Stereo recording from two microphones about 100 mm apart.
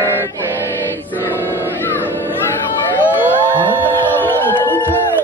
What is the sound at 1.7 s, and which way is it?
Music, 25° left (ahead or behind).